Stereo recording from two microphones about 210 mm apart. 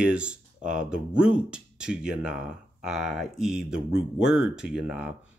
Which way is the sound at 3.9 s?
65° left (ahead or behind).